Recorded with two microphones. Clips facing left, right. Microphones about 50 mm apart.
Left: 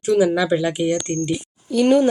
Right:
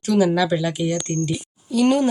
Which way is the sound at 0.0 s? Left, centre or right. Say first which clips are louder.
Left 1 dB; centre.